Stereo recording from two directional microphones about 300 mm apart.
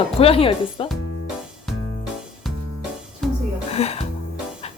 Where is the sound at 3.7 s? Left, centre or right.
Left.